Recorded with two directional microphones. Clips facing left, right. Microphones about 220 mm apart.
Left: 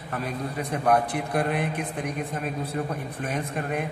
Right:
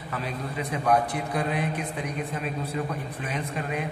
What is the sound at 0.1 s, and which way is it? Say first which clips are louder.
A man's voice: left 2 dB; 45° left (ahead or behind).